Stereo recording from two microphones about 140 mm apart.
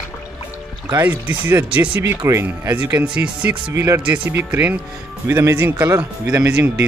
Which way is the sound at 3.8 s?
20° right (ahead or behind).